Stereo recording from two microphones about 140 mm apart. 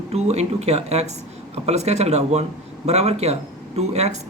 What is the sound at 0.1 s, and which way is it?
Speech, 50° right (ahead or behind).